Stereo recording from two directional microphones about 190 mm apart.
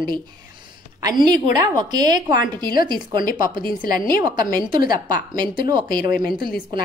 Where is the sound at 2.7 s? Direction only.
50° left (ahead or behind).